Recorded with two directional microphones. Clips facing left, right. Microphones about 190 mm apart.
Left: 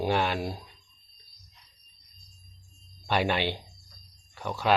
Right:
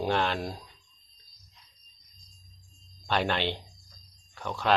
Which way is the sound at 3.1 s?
10° left (ahead or behind).